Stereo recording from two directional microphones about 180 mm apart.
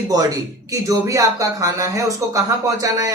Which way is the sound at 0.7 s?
20° right (ahead or behind).